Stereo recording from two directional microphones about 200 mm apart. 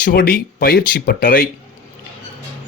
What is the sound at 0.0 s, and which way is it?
Speech, 50° left (ahead or behind).